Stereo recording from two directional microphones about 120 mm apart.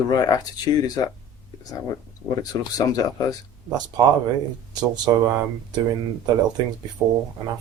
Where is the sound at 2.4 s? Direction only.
30° left (ahead or behind).